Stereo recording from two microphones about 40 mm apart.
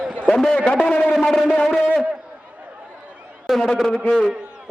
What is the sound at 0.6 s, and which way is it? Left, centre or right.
Speech, left.